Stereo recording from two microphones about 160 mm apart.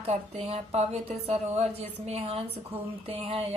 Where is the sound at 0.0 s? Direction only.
40° right (ahead or behind).